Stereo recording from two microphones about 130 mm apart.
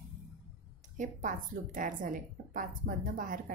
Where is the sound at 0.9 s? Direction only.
75° right (ahead or behind).